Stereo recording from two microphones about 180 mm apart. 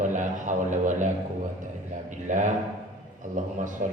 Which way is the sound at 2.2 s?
45° right (ahead or behind).